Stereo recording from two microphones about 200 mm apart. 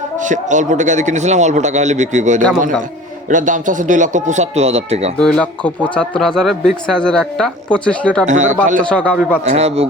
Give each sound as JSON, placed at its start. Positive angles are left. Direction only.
{"t": 0.2, "sound": "speech", "side_deg": -40}
{"t": 5.1, "sound": "speech", "side_deg": 5}
{"t": 8.3, "sound": "speech", "side_deg": -40}
{"t": 8.8, "sound": "speech", "side_deg": 5}
{"t": 9.4, "sound": "speech", "side_deg": -35}